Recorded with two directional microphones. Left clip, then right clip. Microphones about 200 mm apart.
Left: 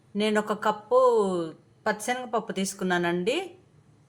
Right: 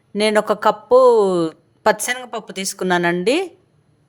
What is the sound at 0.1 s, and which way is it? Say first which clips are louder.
Speech: right 10 dB; 40° right (ahead or behind).